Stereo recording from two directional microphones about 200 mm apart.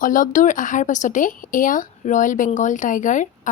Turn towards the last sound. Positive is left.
turn(degrees=40)  # may be behind; listen again after turning